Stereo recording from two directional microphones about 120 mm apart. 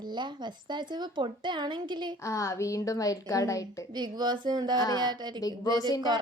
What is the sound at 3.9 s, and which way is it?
A woman's voice, 35° right (ahead or behind).